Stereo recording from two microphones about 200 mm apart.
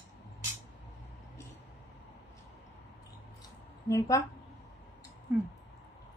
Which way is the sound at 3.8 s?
15° left (ahead or behind).